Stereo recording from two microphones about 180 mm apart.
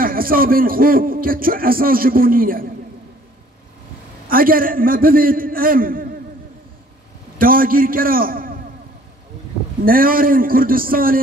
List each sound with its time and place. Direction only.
0.0 s speech: 55° right (ahead or behind)
4.3 s speech: 50° right (ahead or behind)
7.3 s a man's voice: 50° right (ahead or behind)
9.8 s speech: 50° right (ahead or behind)